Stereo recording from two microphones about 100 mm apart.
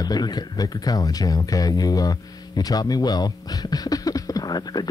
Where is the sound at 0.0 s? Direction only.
40° left (ahead or behind).